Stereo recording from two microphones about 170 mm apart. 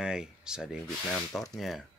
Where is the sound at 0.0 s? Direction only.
5° right (ahead or behind).